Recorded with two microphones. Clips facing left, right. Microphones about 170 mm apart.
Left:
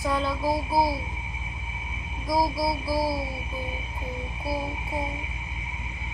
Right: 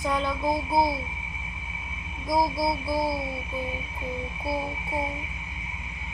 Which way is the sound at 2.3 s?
Centre (ahead or behind).